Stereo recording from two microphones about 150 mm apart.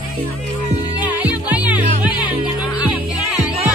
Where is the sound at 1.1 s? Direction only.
10° right (ahead or behind).